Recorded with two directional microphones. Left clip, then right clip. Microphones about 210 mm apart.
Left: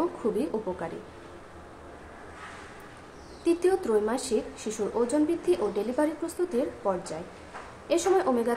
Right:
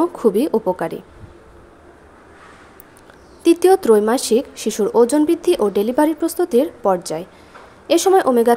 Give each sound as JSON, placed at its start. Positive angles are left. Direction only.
{"t": 0.0, "sound": "speech", "side_deg": -45}
{"t": 3.4, "sound": "a woman's voice", "side_deg": -45}